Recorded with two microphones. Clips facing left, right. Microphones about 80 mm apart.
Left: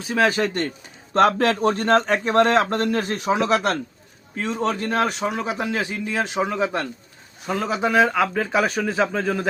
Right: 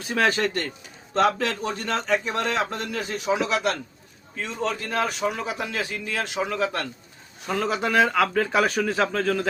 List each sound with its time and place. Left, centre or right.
0.0 s speech: centre
1.1 s a man's voice: left
5.3 s speech: left
7.4 s a man's voice: centre